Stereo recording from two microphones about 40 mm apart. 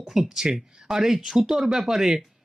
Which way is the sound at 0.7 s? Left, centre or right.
Centre.